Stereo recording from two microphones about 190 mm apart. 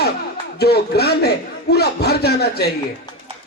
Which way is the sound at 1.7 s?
60° left (ahead or behind).